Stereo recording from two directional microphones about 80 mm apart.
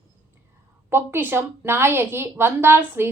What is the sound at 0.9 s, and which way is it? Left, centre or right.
A woman's voice, right.